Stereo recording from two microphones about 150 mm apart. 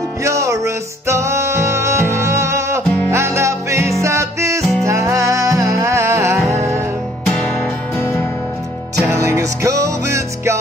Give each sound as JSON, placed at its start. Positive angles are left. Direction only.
{"t": 0.2, "sound": "music", "side_deg": -20}
{"t": 8.0, "sound": "music", "side_deg": 15}
{"t": 9.0, "sound": "music", "side_deg": -20}